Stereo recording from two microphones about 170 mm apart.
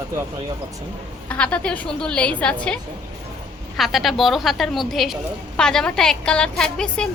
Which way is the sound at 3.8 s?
Centre (ahead or behind).